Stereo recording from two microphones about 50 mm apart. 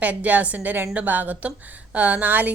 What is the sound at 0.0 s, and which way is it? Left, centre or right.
A woman's voice, right.